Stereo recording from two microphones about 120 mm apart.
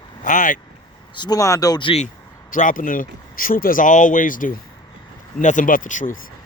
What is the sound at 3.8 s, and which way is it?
Speech, 90° left.